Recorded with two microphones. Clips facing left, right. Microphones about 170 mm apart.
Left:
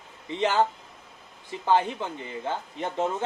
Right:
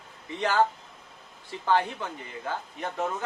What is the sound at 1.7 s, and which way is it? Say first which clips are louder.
Speech: left 2 dB; 20° left (ahead or behind).